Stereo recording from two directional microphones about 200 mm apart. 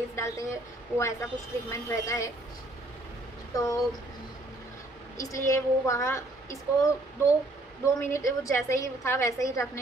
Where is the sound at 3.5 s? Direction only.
15° left (ahead or behind).